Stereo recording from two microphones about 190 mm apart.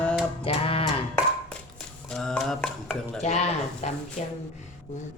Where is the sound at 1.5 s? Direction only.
5° left (ahead or behind).